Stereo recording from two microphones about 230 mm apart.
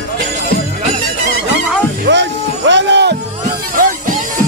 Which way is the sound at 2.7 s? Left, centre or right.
Right.